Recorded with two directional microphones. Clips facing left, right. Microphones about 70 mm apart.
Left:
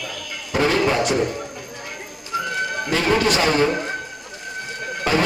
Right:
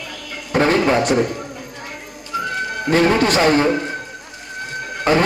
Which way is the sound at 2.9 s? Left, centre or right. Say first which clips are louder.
Right 4 dB; right.